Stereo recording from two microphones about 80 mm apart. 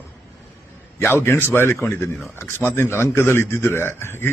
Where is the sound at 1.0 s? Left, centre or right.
Left.